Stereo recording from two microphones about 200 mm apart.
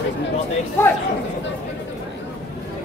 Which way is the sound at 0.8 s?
10° left (ahead or behind).